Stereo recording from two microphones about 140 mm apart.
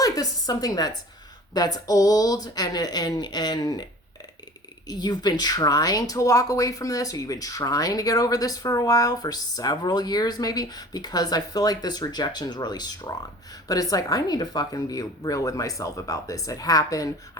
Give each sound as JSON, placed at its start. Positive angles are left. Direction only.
{"t": 0.0, "sound": "a woman's voice", "side_deg": 25}
{"t": 4.9, "sound": "speech", "side_deg": 30}